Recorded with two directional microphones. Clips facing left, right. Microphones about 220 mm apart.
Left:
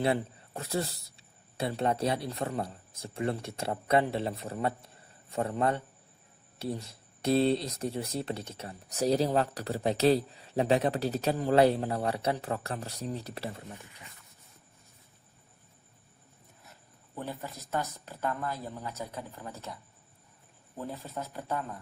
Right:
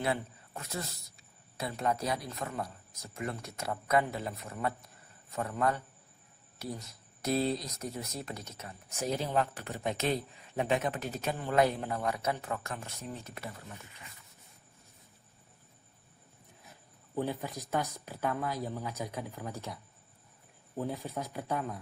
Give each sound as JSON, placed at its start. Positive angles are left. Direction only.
{"t": 0.0, "sound": "a man's voice", "side_deg": 30}
{"t": 17.2, "sound": "speech", "side_deg": -15}
{"t": 20.9, "sound": "speech", "side_deg": -15}